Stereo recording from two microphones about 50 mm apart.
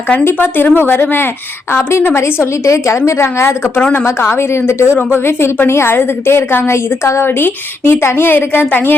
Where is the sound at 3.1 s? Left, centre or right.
Left.